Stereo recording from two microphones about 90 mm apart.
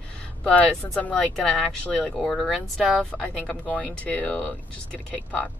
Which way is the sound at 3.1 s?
15° left (ahead or behind).